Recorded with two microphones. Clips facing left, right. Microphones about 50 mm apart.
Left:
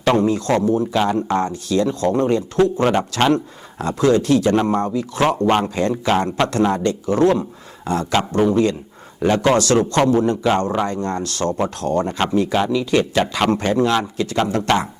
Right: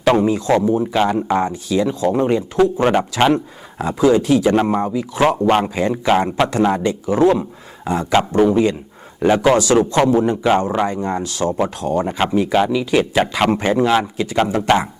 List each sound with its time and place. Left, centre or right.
0.0 s speech: centre